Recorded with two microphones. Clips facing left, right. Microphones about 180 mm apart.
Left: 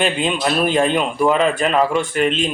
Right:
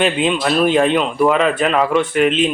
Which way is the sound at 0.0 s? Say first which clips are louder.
Right 2 dB; centre (ahead or behind).